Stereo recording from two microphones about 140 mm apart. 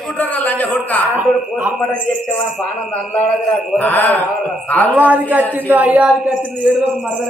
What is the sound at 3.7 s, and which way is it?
Speech, 15° left (ahead or behind).